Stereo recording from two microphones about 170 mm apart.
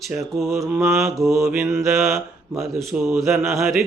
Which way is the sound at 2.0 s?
15° right (ahead or behind).